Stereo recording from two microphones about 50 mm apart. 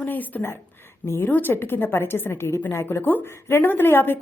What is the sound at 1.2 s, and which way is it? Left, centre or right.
Speech, left.